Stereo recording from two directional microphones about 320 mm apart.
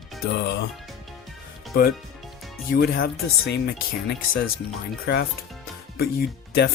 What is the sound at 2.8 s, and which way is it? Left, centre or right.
Speech, left.